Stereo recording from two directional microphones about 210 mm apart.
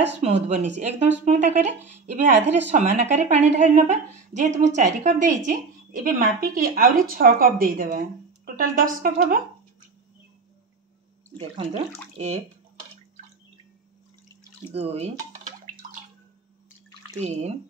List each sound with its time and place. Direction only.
0.2 s a woman's voice: 30° right (ahead or behind)
11.3 s a woman's voice: 30° right (ahead or behind)
14.7 s speech: 30° right (ahead or behind)
17.2 s a woman's voice: 30° right (ahead or behind)